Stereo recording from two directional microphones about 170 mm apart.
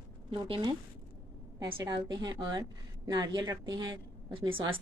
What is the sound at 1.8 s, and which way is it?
A woman's voice, 25° right (ahead or behind).